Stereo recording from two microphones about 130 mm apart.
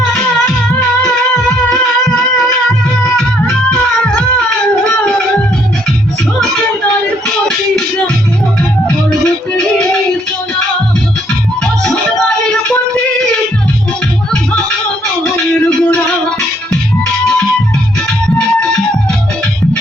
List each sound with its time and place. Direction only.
3.0 s music: 5° left (ahead or behind)
8.9 s music: 5° left (ahead or behind)
12.5 s music: 5° left (ahead or behind)
15.2 s music: 5° left (ahead or behind)